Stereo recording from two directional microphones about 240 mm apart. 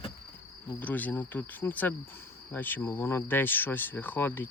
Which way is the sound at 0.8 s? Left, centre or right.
Centre.